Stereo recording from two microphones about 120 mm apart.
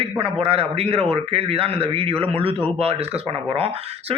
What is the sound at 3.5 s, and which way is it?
Speech, 55° right (ahead or behind).